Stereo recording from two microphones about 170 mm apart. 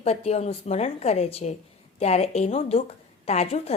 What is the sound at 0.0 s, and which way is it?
A woman's voice, 35° left (ahead or behind).